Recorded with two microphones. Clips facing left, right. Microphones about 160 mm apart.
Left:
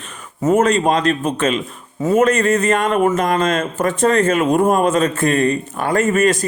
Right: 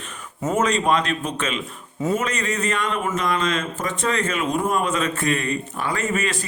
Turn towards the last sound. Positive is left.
turn(degrees=45)  # may be behind; listen again after turning